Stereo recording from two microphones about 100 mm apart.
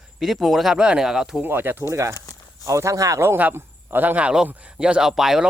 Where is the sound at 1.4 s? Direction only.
20° right (ahead or behind); by 5.4 s 5° right (ahead or behind).